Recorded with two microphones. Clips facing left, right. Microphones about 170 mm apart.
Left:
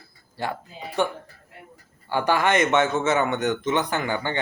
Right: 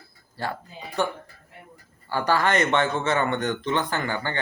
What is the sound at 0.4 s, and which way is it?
A man's voice, 15° left (ahead or behind).